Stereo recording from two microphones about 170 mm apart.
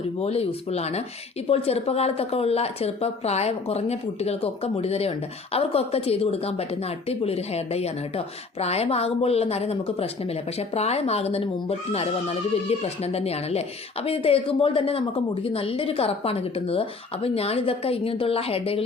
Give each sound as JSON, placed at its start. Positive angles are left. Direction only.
{"t": 0.2, "sound": "speech", "side_deg": 35}